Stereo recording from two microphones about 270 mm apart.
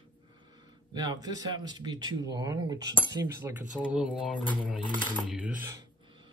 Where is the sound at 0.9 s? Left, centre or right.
Centre.